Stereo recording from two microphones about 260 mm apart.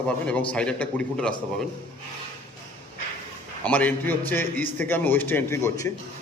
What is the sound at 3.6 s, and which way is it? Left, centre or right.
A man's voice, centre.